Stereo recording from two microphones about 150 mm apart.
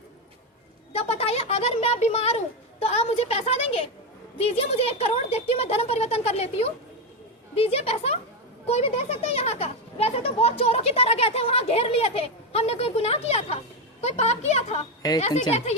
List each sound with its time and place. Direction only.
0.9 s a sound: 45° left (ahead or behind)
2.8 s a child's voice: 45° left (ahead or behind)
15.0 s a woman's voice: 25° left (ahead or behind)
15.4 s a child's voice: 45° left (ahead or behind)